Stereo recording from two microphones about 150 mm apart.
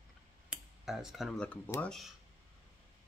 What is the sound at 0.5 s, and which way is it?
Speech, 5° right (ahead or behind).